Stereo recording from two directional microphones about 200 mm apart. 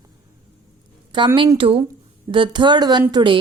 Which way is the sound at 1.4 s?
25° right (ahead or behind).